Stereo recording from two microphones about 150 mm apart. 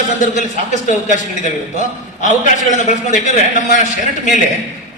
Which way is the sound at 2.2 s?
55° left (ahead or behind).